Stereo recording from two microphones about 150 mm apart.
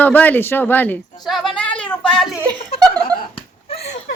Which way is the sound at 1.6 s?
10° left (ahead or behind).